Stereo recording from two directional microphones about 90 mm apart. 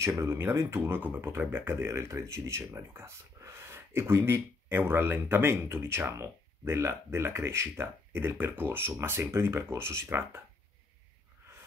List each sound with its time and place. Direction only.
0.2 s speech: 25° right (ahead or behind)